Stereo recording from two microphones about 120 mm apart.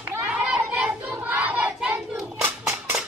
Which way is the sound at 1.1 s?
15° right (ahead or behind).